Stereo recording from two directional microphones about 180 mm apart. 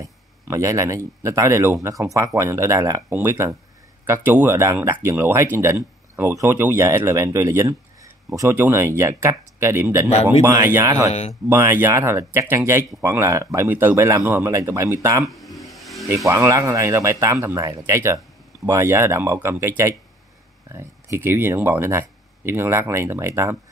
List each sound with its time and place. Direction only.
0.0 s speech: 15° right (ahead or behind)
11.1 s speech: 35° left (ahead or behind)
11.4 s speech: 15° right (ahead or behind)
15.2 s vehicle: centre (ahead or behind)
16.3 s speech: 15° right (ahead or behind)
20.7 s speech: 15° right (ahead or behind)